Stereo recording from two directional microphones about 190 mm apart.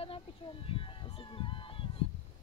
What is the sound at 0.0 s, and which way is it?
Honk, 30° left (ahead or behind).